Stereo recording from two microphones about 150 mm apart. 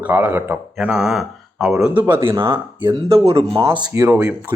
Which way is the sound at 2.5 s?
30° right (ahead or behind).